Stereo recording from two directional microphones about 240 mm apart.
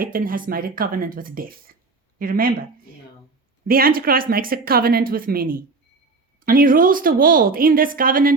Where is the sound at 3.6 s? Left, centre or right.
Right.